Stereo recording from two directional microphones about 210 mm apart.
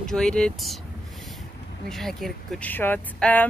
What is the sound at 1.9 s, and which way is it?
Speech, centre (ahead or behind).